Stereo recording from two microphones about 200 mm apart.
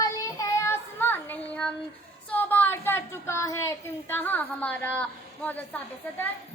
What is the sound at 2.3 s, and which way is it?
A woman's voice, 10° left (ahead or behind).